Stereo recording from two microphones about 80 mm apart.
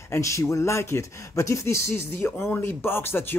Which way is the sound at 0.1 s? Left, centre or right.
Left.